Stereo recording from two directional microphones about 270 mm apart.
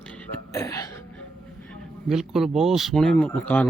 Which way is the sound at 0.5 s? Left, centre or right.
Centre.